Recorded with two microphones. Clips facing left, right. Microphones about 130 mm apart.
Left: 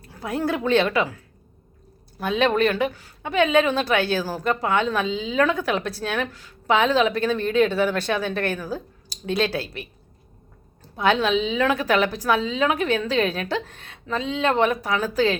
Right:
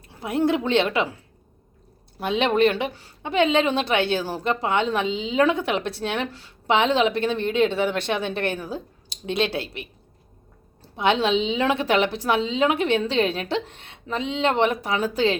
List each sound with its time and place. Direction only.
0.0 s a woman's voice: 20° right (ahead or behind)
10.9 s a woman's voice: 25° right (ahead or behind)